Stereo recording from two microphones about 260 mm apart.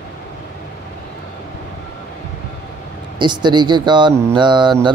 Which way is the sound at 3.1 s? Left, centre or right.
Centre.